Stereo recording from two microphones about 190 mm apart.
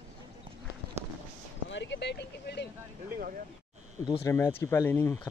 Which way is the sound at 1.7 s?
70° left (ahead or behind).